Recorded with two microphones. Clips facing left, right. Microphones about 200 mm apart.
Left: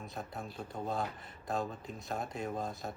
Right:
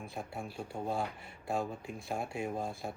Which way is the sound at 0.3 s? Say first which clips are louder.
Right 2 dB; 10° right (ahead or behind).